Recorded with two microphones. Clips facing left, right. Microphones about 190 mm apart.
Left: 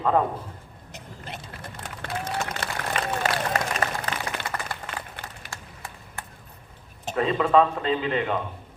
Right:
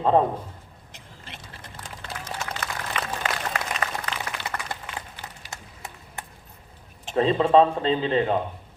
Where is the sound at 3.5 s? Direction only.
45° left (ahead or behind).